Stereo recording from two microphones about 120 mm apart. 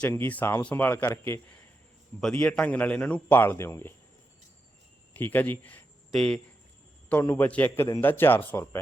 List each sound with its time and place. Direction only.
0.0 s a man's voice: 15° left (ahead or behind)
2.3 s a man's voice: 10° left (ahead or behind)
5.1 s a man's voice: 15° left (ahead or behind)
7.1 s a man's voice: 15° left (ahead or behind)
7.8 s a man's voice: 25° left (ahead or behind)